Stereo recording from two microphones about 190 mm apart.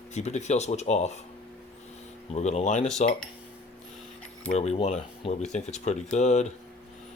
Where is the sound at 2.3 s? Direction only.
35° left (ahead or behind).